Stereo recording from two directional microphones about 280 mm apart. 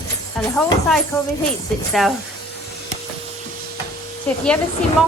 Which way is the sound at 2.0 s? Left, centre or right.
Centre.